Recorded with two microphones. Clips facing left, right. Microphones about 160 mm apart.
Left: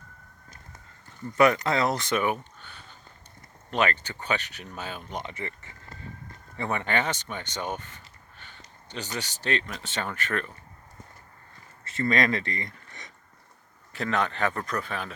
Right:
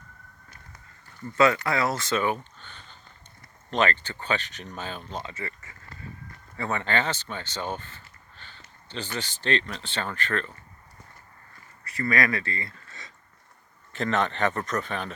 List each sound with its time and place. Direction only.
1.4 s speech: 20° left (ahead or behind)
2.4 s a sound: 10° left (ahead or behind)
3.7 s speech: 10° left (ahead or behind)
11.9 s speech: 25° left (ahead or behind)
13.9 s speech: 5° left (ahead or behind)